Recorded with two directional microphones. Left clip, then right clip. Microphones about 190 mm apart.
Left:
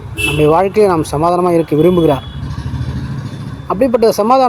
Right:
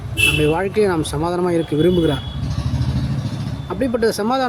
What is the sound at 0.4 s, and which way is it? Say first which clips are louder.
Speech: left 7 dB; 10° left (ahead or behind).